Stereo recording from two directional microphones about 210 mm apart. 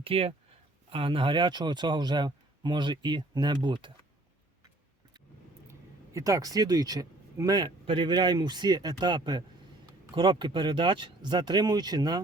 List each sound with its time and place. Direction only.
0.0 s speech: 25° right (ahead or behind)
6.1 s speech: 15° right (ahead or behind)